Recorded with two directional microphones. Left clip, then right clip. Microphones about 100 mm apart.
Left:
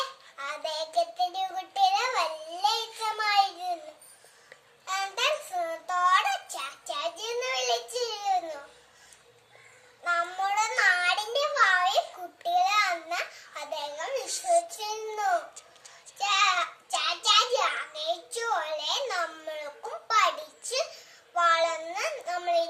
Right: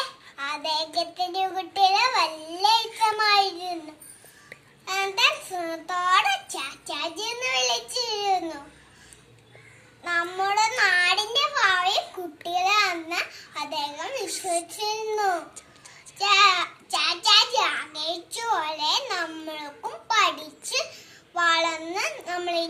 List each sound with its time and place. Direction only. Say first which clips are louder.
0.3 s a child's voice: right 6 dB; 45° left (ahead or behind)
3.0 s a child's voice: right 2 dB; 50° left (ahead or behind)
4.9 s a child's voice: right 5 dB; 50° left (ahead or behind)
10.0 s child singing: right 2 dB; 50° left (ahead or behind)
10.4 s a child's voice: right 3 dB; 50° left (ahead or behind)
14.3 s a child's voice: left 5 dB; centre (ahead or behind)
14.8 s child singing: right 6 dB; 55° left (ahead or behind)
16.1 s a child's voice: right 6 dB; 50° left (ahead or behind)
20.1 s child singing: right 2 dB; 65° left (ahead or behind)
21.4 s child singing: right 2 dB; 60° left (ahead or behind)